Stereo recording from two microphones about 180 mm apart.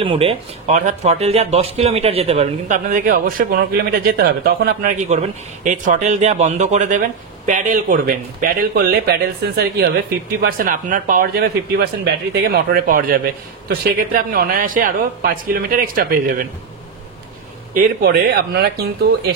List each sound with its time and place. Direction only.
0.0 s speech: 30° right (ahead or behind); by 9.8 s 60° right (ahead or behind)
10.4 s speech: 50° right (ahead or behind)
17.7 s speech: 50° right (ahead or behind)